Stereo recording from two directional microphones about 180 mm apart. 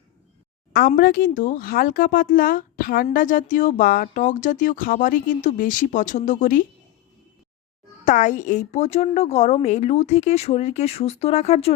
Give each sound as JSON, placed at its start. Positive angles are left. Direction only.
{"t": 0.7, "sound": "speech", "side_deg": 55}
{"t": 8.0, "sound": "speech", "side_deg": 45}